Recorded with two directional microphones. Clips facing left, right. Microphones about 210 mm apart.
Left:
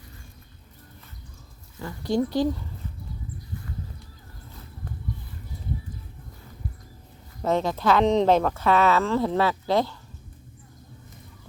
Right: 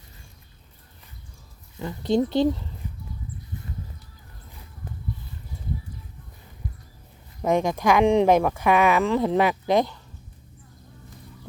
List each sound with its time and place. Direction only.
1.8 s speech: 20° right (ahead or behind)
7.4 s speech: 15° right (ahead or behind)